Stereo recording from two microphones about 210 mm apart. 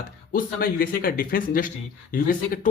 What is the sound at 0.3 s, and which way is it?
Speech, 45° left (ahead or behind).